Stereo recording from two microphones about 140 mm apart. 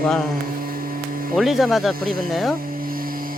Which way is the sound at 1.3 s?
Centre (ahead or behind).